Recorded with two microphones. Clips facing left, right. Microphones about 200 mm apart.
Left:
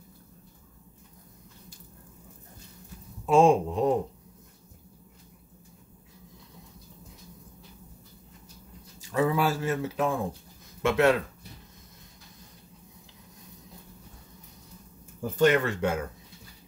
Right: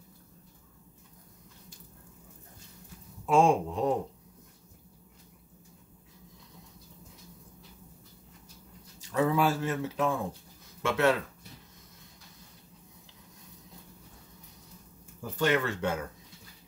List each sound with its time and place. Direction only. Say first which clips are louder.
3.3 s speech: left 4 dB; 20° left (ahead or behind)
9.1 s speech: left 1 dB; 5° left (ahead or behind)
15.3 s speech: left 5 dB; 15° left (ahead or behind)